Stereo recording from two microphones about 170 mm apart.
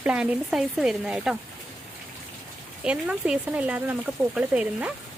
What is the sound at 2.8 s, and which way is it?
Speech, 5° right (ahead or behind).